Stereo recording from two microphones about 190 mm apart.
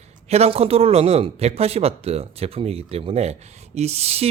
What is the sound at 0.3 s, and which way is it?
Speech, 35° right (ahead or behind).